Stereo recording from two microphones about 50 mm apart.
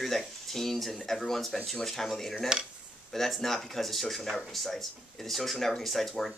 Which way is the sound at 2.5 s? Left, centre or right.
Centre.